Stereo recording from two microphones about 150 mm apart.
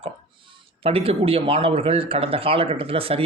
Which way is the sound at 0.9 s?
40° right (ahead or behind).